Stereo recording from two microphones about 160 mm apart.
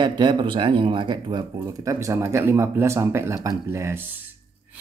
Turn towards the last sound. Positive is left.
turn(degrees=-15)  # may be behind; listen again after turning